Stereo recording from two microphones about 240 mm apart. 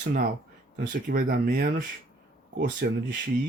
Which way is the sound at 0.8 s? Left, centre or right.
Right.